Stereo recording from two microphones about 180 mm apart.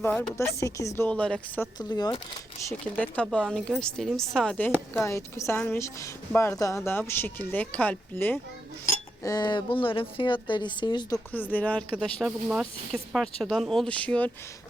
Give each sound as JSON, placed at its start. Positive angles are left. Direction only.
{"t": 0.0, "sound": "speech", "side_deg": 10}
{"t": 1.8, "sound": "speech", "side_deg": 20}
{"t": 2.8, "sound": "speech", "side_deg": 5}
{"t": 9.2, "sound": "speech", "side_deg": 20}
{"t": 11.3, "sound": "speech", "side_deg": 10}